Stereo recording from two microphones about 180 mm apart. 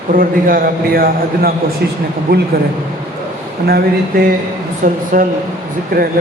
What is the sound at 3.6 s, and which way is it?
Speech, 60° right (ahead or behind).